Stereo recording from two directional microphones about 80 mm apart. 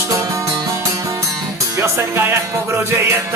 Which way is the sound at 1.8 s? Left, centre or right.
Right.